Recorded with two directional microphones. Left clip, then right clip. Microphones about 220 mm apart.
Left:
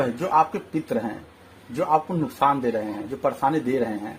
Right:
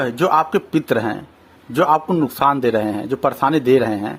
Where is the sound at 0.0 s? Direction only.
35° right (ahead or behind).